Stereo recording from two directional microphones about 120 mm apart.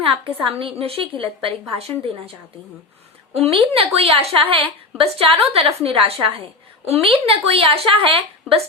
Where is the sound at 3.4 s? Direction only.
55° right (ahead or behind).